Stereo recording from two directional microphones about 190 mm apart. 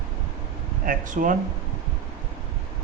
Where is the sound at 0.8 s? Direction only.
45° right (ahead or behind).